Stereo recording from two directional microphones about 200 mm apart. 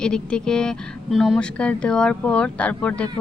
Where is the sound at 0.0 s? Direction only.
5° left (ahead or behind).